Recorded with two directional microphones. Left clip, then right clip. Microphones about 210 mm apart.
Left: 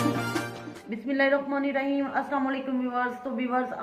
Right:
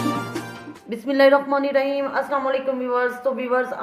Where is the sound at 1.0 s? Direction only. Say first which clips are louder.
Right 9 dB; 50° right (ahead or behind).